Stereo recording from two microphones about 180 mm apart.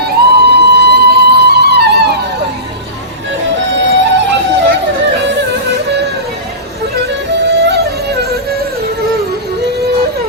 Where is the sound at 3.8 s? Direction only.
85° right.